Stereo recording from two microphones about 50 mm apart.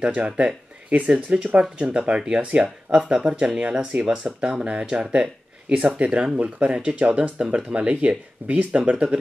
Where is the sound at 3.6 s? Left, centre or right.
Right.